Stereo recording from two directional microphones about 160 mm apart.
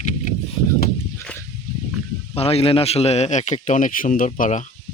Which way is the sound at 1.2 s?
15° left (ahead or behind).